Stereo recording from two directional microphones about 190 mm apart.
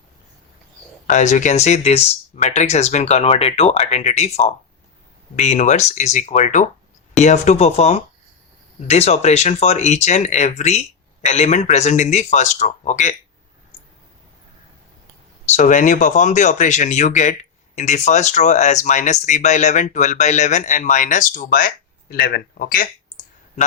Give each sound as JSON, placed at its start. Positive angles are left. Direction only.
{"t": 1.0, "sound": "speech", "side_deg": 40}
{"t": 15.5, "sound": "speech", "side_deg": 40}